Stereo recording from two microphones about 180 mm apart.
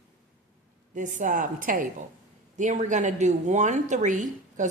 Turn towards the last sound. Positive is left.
turn(degrees=-45)  # may be behind; listen again after turning